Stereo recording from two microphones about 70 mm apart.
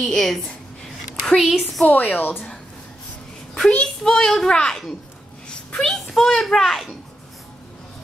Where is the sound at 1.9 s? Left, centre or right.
Left.